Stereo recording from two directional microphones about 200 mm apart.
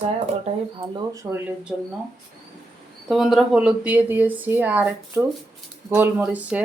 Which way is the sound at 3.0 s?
Centre (ahead or behind).